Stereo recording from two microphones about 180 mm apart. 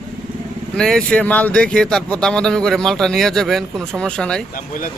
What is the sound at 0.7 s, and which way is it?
Speech, 5° left (ahead or behind).